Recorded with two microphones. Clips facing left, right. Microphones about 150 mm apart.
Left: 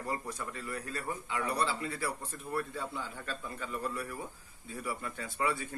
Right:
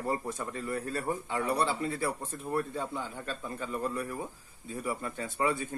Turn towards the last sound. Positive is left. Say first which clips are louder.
# right 3 dB
turn(degrees=-25)  # may be behind; listen again after turning